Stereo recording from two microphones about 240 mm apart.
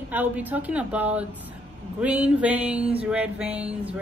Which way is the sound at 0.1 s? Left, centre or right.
Centre.